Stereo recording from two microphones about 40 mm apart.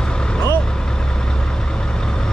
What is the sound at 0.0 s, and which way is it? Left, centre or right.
Vehicle, left.